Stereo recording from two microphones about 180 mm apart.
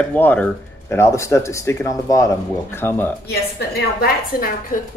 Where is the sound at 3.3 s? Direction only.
60° left (ahead or behind).